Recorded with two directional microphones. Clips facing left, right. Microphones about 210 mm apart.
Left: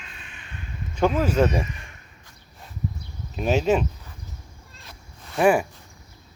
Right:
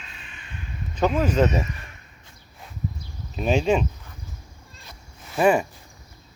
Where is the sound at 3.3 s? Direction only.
5° left (ahead or behind).